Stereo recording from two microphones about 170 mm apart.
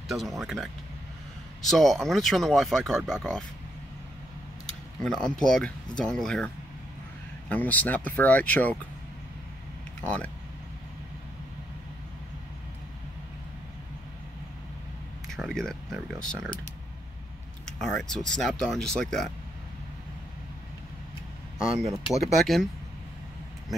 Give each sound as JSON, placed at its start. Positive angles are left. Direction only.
{"t": 0.1, "sound": "speech", "side_deg": 0}
{"t": 5.0, "sound": "speech", "side_deg": 0}
{"t": 10.0, "sound": "speech", "side_deg": 5}
{"t": 15.3, "sound": "speech", "side_deg": 0}
{"t": 17.6, "sound": "speech", "side_deg": 5}
{"t": 22.1, "sound": "speech", "side_deg": 0}